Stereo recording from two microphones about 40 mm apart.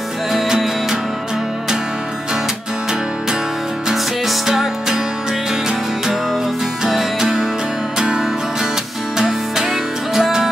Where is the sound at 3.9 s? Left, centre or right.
Centre.